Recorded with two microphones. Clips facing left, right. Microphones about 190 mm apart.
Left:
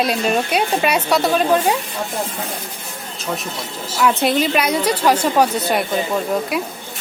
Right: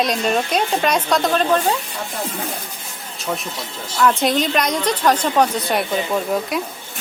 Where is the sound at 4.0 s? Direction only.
5° left (ahead or behind).